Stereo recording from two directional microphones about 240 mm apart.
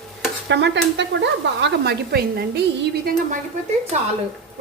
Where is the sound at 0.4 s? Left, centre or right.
Right.